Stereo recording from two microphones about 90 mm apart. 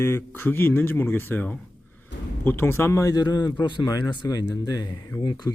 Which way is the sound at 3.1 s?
50° left (ahead or behind).